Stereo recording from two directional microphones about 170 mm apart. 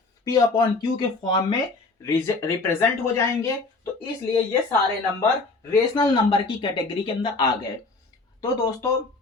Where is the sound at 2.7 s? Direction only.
15° left (ahead or behind).